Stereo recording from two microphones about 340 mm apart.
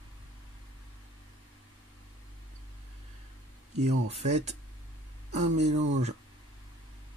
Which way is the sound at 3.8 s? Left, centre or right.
Centre.